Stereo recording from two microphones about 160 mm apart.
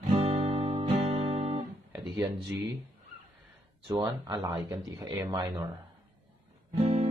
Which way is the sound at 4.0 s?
25° right (ahead or behind).